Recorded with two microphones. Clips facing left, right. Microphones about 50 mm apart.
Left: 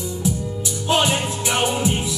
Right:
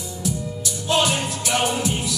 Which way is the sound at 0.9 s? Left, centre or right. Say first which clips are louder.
Left 1 dB; left.